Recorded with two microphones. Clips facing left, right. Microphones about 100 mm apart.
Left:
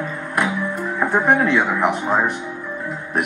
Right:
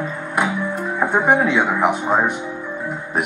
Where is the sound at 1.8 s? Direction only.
Centre (ahead or behind).